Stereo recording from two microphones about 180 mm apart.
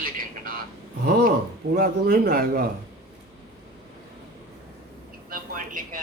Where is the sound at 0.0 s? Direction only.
50° right (ahead or behind).